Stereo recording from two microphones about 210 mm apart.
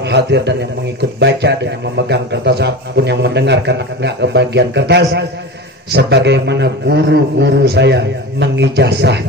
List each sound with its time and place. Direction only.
0.0 s a man's voice: 55° right (ahead or behind)